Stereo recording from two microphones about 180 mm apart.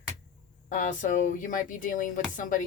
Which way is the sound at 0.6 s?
45° left (ahead or behind).